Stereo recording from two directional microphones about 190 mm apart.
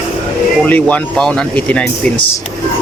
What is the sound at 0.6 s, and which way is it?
Speech, 5° left (ahead or behind).